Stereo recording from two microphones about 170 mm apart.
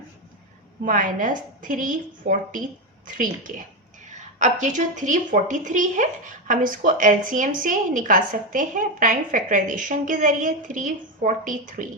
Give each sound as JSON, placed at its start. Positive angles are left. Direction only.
{"t": 0.9, "sound": "a woman's voice", "side_deg": -50}